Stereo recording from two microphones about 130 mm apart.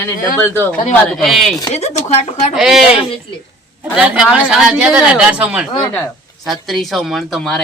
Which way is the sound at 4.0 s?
5° right (ahead or behind).